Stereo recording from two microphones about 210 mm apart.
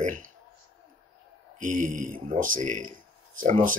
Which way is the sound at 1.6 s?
40° right (ahead or behind).